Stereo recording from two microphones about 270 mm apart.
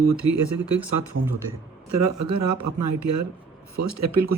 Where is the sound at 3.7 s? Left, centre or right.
Right.